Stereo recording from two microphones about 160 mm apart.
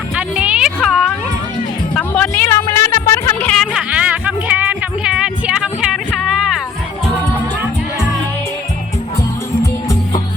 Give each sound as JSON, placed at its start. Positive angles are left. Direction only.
{"t": 0.2, "sound": "a sound", "side_deg": -5}
{"t": 2.0, "sound": "music", "side_deg": 10}
{"t": 3.5, "sound": "music", "side_deg": 0}